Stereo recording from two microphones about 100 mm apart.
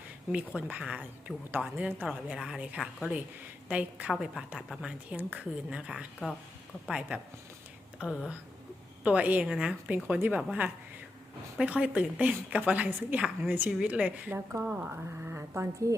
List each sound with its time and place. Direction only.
0.3 s a woman's voice: 15° right (ahead or behind)
4.1 s a woman's voice: 5° right (ahead or behind); by 16.0 s 30° right (ahead or behind)